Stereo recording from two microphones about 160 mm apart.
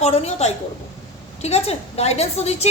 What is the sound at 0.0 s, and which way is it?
A woman's voice, 45° left (ahead or behind).